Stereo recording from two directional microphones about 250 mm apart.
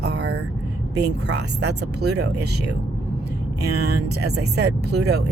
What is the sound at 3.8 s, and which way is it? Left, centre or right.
Speech, right.